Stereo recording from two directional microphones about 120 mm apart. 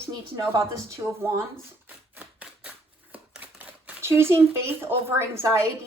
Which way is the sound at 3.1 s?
10° right (ahead or behind).